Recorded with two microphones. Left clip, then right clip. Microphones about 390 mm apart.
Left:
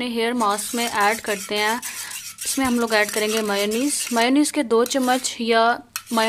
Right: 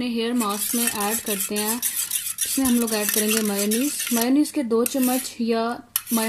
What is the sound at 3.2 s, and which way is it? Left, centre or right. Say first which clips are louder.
Speech: left 3 dB; left.